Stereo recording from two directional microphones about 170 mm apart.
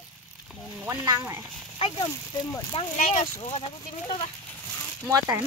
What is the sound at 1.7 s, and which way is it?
Speech, 35° left (ahead or behind).